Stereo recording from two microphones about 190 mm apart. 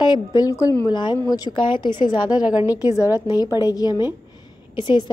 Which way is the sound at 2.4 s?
5° right (ahead or behind).